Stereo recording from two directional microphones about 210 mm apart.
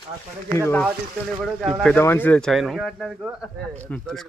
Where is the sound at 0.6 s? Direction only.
10° left (ahead or behind).